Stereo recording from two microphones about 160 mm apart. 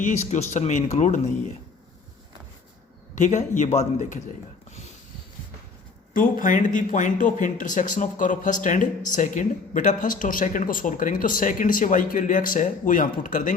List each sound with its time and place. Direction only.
0.0 s speech: 45° left (ahead or behind)
3.2 s speech: 50° left (ahead or behind)
6.1 s speech: 55° left (ahead or behind)